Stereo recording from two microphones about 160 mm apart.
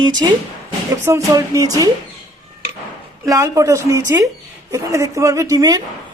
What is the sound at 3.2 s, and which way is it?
Speech, 20° right (ahead or behind).